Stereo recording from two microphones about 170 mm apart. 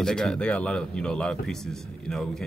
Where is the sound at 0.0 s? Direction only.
5° left (ahead or behind).